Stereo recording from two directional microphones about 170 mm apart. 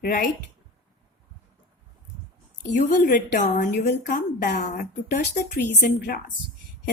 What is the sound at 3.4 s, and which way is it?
A woman's voice, 45° left (ahead or behind).